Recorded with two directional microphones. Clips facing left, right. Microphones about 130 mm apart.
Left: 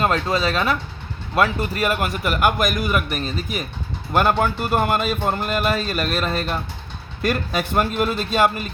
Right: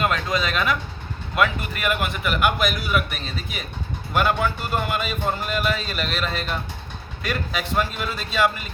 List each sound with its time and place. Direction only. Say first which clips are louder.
0.0 s a man's voice: left 3 dB; 30° left (ahead or behind)